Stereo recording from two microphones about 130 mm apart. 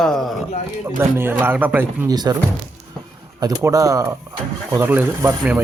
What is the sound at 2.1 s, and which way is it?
Speech, 30° right (ahead or behind).